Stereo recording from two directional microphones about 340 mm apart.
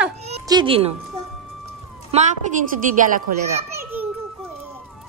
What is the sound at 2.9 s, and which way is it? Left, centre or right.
Speech, right.